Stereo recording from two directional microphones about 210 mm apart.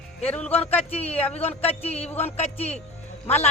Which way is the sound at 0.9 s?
30° left (ahead or behind).